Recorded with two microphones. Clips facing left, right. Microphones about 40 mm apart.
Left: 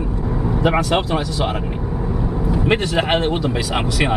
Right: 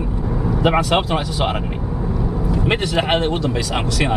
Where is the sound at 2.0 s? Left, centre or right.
Centre.